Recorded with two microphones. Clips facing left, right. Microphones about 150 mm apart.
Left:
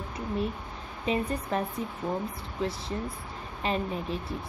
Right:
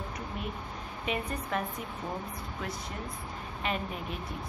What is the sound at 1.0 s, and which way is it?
Speech, 30° left (ahead or behind).